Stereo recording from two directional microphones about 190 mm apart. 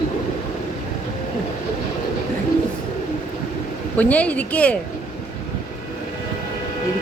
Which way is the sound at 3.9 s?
5° left (ahead or behind).